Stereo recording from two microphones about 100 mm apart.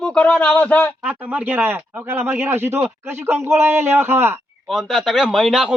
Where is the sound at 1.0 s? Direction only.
15° right (ahead or behind).